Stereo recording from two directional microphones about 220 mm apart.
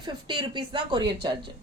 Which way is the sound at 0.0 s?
20° right (ahead or behind).